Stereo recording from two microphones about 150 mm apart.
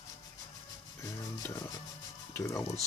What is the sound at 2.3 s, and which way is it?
Speech, 20° left (ahead or behind).